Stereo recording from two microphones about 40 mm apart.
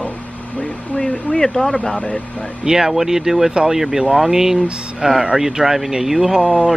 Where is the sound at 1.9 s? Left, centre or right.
Left.